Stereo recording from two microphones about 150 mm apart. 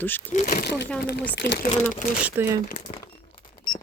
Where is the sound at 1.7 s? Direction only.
55° left (ahead or behind).